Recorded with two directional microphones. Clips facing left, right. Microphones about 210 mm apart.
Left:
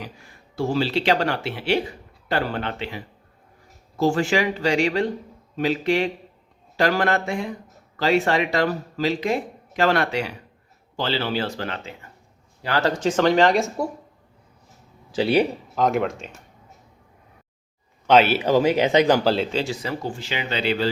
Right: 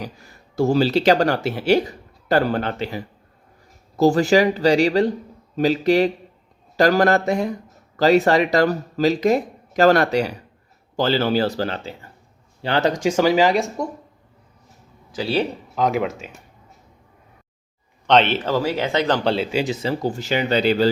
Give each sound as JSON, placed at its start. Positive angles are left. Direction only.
{"t": 0.0, "sound": "speech", "side_deg": -40}
{"t": 12.6, "sound": "speech", "side_deg": -20}
{"t": 15.1, "sound": "speech", "side_deg": 25}
{"t": 15.7, "sound": "speech", "side_deg": 0}
{"t": 18.0, "sound": "speech", "side_deg": 5}
{"t": 19.7, "sound": "speech", "side_deg": -30}